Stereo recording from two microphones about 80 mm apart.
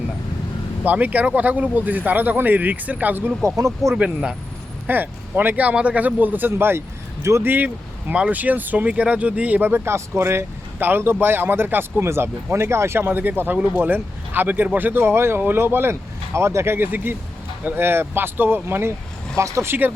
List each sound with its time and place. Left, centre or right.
0.9 s speech: right
3.4 s speech: right
3.9 s speech: centre
4.9 s speech: right